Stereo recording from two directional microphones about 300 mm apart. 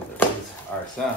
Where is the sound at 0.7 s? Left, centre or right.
Centre.